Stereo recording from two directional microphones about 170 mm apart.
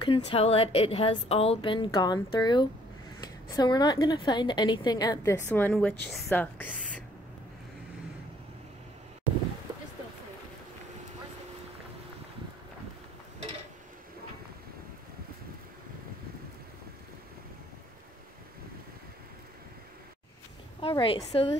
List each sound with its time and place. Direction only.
0.0 s a woman's voice: 30° left (ahead or behind)
5.5 s a woman's voice: 5° left (ahead or behind)
20.9 s a woman's voice: 30° left (ahead or behind)